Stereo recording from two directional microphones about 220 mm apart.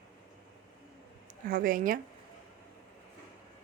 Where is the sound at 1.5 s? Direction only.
40° right (ahead or behind).